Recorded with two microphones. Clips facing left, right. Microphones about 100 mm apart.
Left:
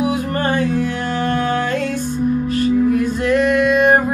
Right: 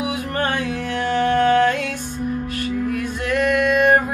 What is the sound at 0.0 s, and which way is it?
Music, 40° left (ahead or behind).